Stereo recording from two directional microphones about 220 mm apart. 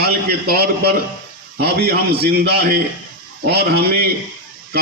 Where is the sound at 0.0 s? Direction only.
45° right (ahead or behind).